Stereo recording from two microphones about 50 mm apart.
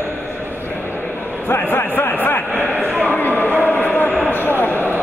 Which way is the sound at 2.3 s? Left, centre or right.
Left.